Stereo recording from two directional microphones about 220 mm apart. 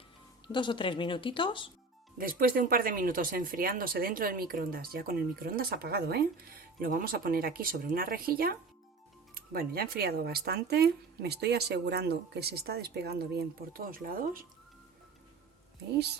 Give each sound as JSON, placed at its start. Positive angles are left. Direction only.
{"t": 0.4, "sound": "speech", "side_deg": 20}
{"t": 2.1, "sound": "speech", "side_deg": -40}